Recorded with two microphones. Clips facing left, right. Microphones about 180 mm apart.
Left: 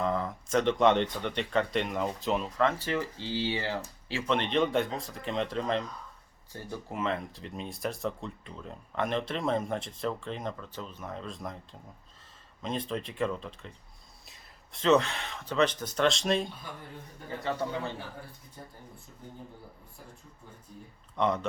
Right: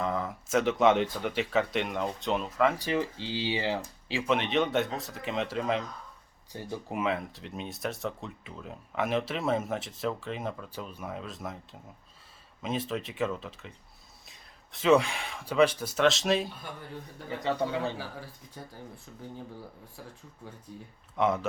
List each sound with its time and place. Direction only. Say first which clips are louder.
0.0 s speech: left 1 dB; centre (ahead or behind)
4.4 s speech: left 3 dB; 5° right (ahead or behind)
6.5 s speech: right 3 dB; 15° right (ahead or behind)
17.4 s speech: right 3 dB; 20° right (ahead or behind)
18.6 s speech: right 3 dB; 90° right
21.2 s speech: right 1 dB; 5° right (ahead or behind)